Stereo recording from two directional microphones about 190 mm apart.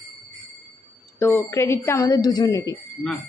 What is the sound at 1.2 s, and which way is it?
A woman's voice, 10° left (ahead or behind).